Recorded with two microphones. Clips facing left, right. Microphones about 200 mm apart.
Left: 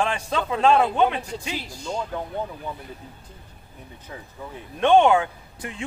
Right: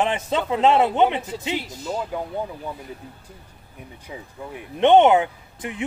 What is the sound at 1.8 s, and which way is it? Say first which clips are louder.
Speech: right 2 dB; 5° right (ahead or behind).